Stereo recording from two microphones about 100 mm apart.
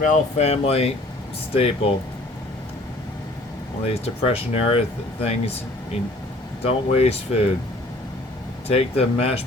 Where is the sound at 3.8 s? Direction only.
90° left.